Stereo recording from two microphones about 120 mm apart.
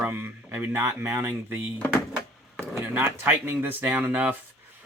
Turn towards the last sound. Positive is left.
turn(degrees=-15)  # may be behind; listen again after turning